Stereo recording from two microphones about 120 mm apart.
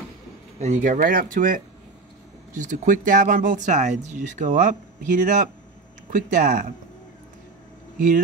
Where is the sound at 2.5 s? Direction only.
90° right.